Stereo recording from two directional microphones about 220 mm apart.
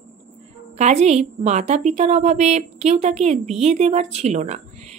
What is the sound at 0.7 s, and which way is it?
A woman's voice, 30° right (ahead or behind).